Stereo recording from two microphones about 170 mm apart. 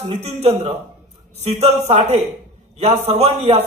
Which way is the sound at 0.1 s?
40° right (ahead or behind).